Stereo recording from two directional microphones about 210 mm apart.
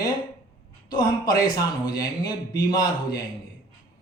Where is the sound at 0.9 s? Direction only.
20° left (ahead or behind).